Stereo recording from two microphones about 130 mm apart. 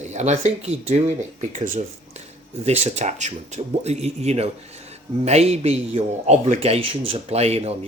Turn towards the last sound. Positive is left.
turn(degrees=-50)  # may be behind; listen again after turning